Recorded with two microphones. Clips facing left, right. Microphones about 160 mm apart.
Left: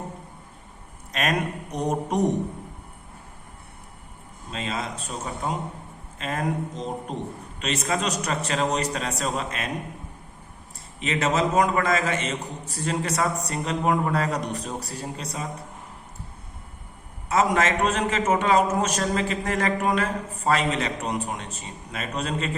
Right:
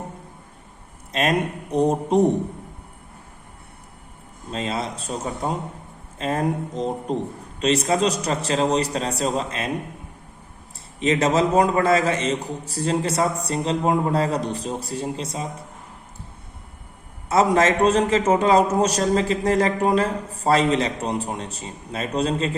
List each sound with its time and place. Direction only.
1.1 s speech: 30° right (ahead or behind)
4.5 s a man's voice: 35° right (ahead or behind)
11.0 s a man's voice: 35° right (ahead or behind)
17.2 s a man's voice: 35° right (ahead or behind)